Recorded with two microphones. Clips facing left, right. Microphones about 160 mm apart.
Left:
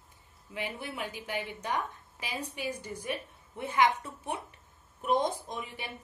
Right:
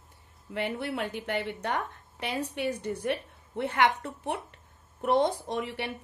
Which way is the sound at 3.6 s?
70° right (ahead or behind).